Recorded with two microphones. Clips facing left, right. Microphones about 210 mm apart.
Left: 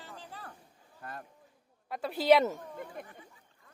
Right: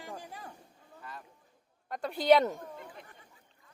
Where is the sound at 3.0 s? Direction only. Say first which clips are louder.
Left 7 dB; 50° left (ahead or behind).